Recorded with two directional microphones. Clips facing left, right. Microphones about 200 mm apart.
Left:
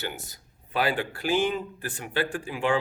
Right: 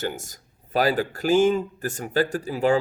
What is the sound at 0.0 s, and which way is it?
Speech, 45° right (ahead or behind).